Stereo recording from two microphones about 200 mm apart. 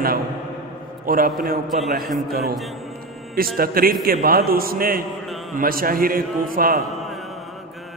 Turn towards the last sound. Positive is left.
turn(degrees=-45)  # may be behind; listen again after turning